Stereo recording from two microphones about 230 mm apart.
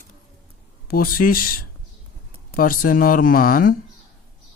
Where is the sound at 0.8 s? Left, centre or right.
Left.